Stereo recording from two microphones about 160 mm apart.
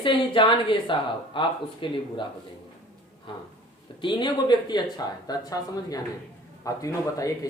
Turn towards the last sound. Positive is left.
turn(degrees=20)  # may be behind; listen again after turning